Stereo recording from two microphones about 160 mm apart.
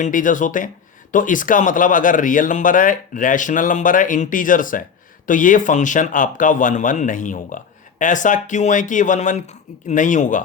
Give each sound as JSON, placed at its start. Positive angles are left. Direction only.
{"t": 0.0, "sound": "speech", "side_deg": 55}